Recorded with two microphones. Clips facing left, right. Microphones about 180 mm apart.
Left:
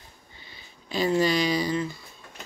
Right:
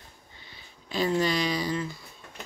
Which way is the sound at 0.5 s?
Centre (ahead or behind).